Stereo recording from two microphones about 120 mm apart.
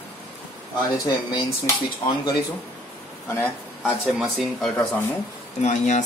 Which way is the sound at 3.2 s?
20° left (ahead or behind).